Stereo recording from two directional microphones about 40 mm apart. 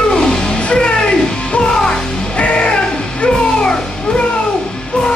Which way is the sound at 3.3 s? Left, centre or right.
Centre.